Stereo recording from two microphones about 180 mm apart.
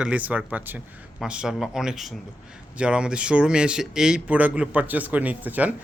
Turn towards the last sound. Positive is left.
turn(degrees=-10)  # may be behind; listen again after turning